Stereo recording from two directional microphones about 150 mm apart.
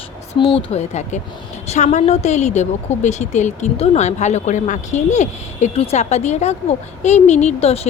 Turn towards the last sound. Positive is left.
turn(degrees=40)  # may be behind; listen again after turning